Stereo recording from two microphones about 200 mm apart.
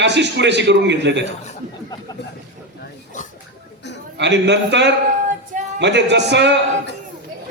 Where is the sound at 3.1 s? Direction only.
40° left (ahead or behind).